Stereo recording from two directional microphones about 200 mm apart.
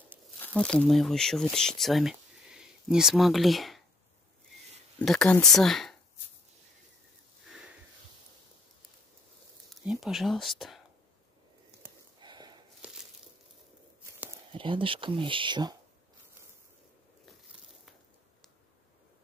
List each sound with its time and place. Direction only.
0.4 s speech: 5° left (ahead or behind)
4.9 s speech: 5° left (ahead or behind)
9.8 s speech: centre (ahead or behind)
12.2 s walk: 20° right (ahead or behind)
12.8 s a sound: 5° right (ahead or behind)
14.5 s speech: 25° right (ahead or behind)